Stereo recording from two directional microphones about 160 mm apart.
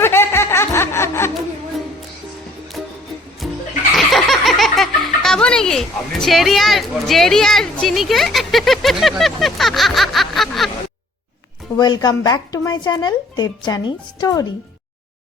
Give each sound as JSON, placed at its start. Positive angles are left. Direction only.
{"t": 0.0, "sound": "music", "side_deg": 15}
{"t": 3.4, "sound": "music", "side_deg": 0}
{"t": 3.9, "sound": "speech", "side_deg": 0}
{"t": 11.8, "sound": "speech", "side_deg": 25}